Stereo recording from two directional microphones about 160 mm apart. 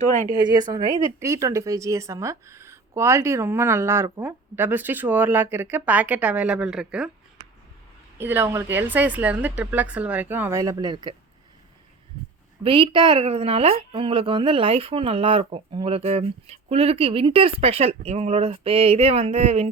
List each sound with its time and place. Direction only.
0.4 s speech: 25° right (ahead or behind); by 7.1 s 5° right (ahead or behind)
8.2 s speech: 15° right (ahead or behind)
12.6 s a woman's voice: 30° right (ahead or behind)